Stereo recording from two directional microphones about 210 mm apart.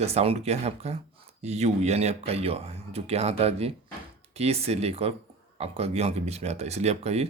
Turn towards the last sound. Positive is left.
turn(degrees=-30)  # may be behind; listen again after turning